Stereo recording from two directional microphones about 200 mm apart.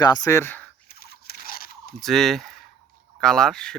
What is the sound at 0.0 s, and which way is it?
Speech, 20° left (ahead or behind).